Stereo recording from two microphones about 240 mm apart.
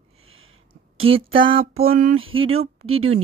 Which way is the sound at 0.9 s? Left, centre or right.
Right.